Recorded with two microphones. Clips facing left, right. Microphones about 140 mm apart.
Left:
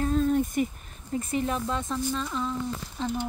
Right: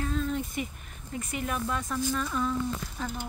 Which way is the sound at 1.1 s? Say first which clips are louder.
Left 5 dB; 30° left (ahead or behind).